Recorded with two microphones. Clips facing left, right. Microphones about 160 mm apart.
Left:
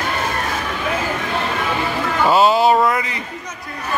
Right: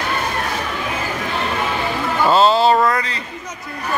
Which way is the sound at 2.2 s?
10° left (ahead or behind).